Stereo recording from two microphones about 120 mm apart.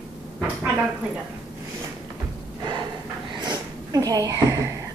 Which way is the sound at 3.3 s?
35° right (ahead or behind).